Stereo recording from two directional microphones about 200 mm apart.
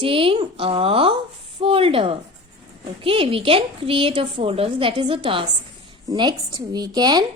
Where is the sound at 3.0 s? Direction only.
30° right (ahead or behind).